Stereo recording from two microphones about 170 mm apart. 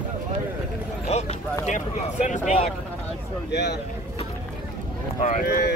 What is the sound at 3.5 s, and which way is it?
Speech, 80° left.